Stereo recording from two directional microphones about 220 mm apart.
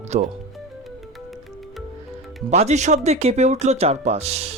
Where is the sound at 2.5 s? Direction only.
30° right (ahead or behind).